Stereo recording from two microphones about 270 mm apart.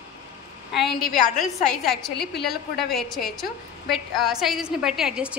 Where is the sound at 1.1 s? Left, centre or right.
Left.